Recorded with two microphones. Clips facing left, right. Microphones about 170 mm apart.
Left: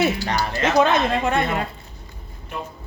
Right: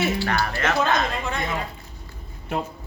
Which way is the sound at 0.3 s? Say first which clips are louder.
Left 2 dB; 20° left (ahead or behind).